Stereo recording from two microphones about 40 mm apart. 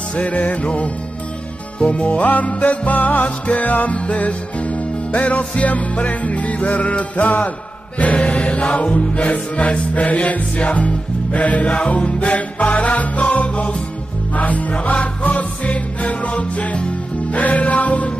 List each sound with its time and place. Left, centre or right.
0.1 s music: left